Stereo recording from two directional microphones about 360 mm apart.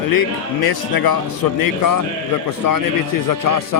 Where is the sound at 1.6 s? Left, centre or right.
Left.